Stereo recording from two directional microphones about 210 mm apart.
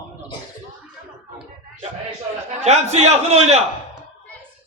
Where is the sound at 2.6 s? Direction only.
30° right (ahead or behind).